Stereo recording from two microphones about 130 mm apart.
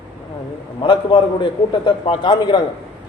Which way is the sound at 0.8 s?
40° left (ahead or behind).